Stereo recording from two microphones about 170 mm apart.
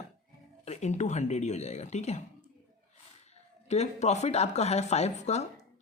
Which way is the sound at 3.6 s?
40° left (ahead or behind).